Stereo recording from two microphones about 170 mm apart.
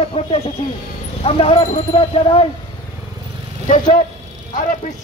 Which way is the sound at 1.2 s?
35° left (ahead or behind).